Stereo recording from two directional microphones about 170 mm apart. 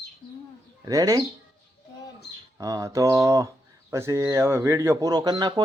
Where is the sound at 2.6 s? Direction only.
20° right (ahead or behind).